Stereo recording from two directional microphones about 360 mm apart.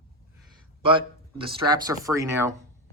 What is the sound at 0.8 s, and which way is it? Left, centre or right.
Speech, centre.